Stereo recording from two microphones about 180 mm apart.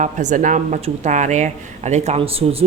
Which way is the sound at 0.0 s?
45° right (ahead or behind).